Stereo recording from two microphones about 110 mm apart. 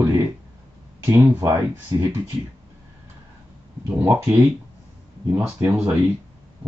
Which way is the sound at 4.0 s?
15° right (ahead or behind).